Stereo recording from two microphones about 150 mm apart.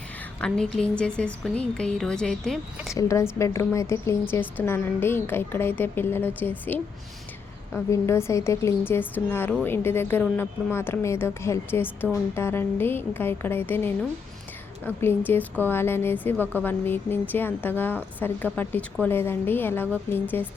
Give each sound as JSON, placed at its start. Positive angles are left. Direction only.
{"t": 0.3, "sound": "a woman's voice", "side_deg": 5}
{"t": 2.9, "sound": "a woman's voice", "side_deg": 20}
{"t": 7.9, "sound": "a woman's voice", "side_deg": 20}